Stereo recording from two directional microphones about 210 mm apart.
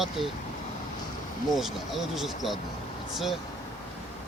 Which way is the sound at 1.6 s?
Centre (ahead or behind).